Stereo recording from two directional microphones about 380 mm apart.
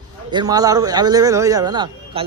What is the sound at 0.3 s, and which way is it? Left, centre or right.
A man's voice, centre.